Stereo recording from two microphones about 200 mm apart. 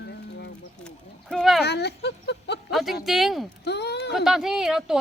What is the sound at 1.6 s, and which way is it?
Speech, 55° left (ahead or behind).